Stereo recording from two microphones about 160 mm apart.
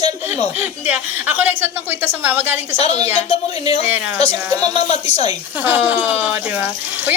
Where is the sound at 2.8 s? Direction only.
40° left (ahead or behind).